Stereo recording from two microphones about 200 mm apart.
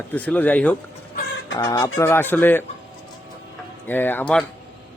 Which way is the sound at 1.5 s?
20° left (ahead or behind).